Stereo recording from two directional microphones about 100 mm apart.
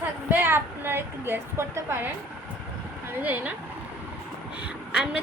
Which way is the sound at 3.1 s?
15° right (ahead or behind).